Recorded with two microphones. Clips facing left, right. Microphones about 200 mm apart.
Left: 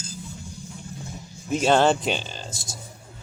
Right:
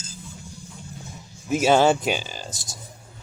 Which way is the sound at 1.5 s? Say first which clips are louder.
Right 1 dB; 5° right (ahead or behind).